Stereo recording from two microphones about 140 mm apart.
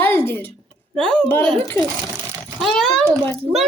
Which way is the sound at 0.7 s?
5° left (ahead or behind).